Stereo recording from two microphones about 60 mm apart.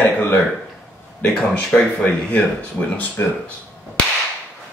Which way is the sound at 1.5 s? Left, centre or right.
Left.